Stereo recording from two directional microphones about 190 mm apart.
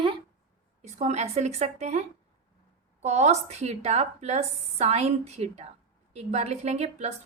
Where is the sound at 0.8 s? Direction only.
35° right (ahead or behind).